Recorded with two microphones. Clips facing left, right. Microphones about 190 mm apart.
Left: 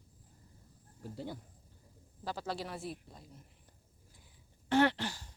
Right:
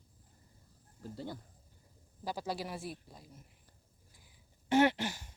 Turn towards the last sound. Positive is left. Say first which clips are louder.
# right 2 dB
turn(degrees=-20)  # may be behind; listen again after turning